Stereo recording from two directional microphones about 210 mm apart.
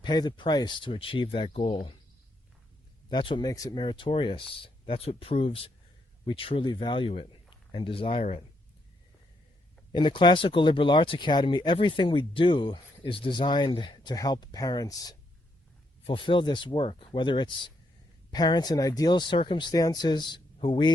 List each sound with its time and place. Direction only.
0.0 s speech: 20° left (ahead or behind)
3.1 s speech: 20° left (ahead or behind)
9.9 s speech: 20° left (ahead or behind)